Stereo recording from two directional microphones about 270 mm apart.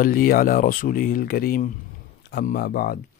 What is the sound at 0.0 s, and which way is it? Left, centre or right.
Speech, left.